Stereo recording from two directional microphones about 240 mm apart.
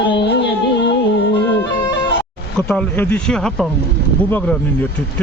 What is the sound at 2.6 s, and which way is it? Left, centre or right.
Speech, centre.